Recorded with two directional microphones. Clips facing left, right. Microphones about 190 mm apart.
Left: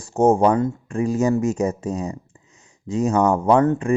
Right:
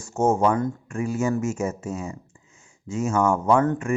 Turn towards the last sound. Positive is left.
turn(degrees=35)  # may be behind; listen again after turning